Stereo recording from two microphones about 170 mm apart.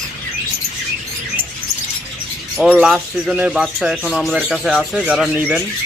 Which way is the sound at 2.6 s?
5° right (ahead or behind).